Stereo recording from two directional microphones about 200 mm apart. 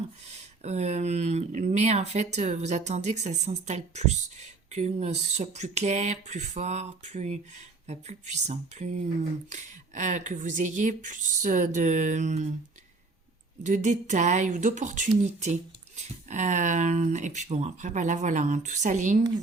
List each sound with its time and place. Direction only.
0.3 s speech: 35° right (ahead or behind)
13.6 s speech: 35° right (ahead or behind)